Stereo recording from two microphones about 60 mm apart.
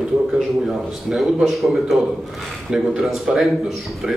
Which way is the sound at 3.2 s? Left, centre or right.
Centre.